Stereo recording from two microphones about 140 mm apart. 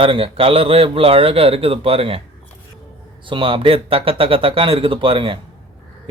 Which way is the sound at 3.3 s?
40° right (ahead or behind).